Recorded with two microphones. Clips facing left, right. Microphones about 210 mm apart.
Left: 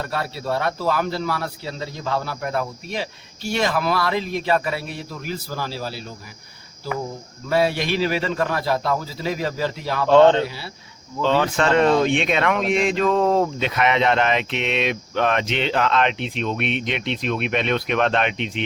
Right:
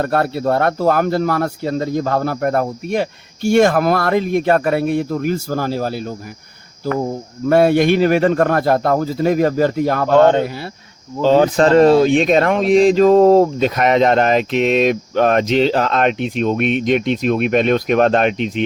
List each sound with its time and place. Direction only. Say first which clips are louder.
0.0 s speech: right 10 dB; 55° right (ahead or behind)
7.1 s speech: right 9 dB; 50° right (ahead or behind)
11.2 s speech: right 8 dB; 35° right (ahead or behind)